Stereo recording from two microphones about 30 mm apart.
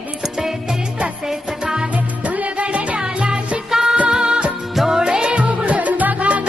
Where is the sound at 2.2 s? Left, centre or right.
Right.